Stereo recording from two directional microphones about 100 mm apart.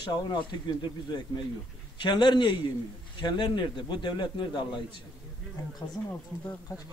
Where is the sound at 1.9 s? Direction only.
50° left (ahead or behind).